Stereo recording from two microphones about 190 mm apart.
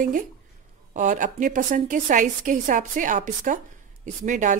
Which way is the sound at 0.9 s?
45° right (ahead or behind).